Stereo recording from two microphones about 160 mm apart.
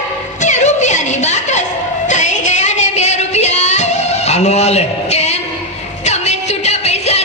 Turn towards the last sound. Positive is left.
turn(degrees=45)  # may be behind; listen again after turning